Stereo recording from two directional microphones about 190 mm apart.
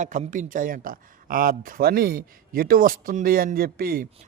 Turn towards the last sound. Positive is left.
turn(degrees=-55)  # may be behind; listen again after turning